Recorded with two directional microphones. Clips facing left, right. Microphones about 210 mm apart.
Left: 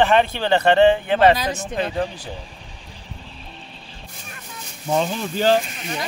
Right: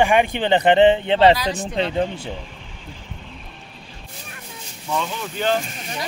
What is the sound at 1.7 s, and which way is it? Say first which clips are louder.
Speech: right 3 dB; 25° right (ahead or behind).